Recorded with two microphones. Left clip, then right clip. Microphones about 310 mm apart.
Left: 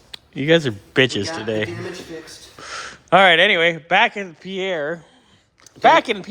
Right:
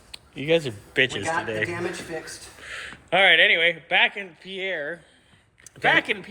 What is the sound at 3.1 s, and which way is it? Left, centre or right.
A man's voice, left.